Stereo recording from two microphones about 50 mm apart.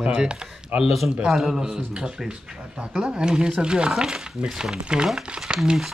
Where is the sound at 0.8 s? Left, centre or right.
Centre.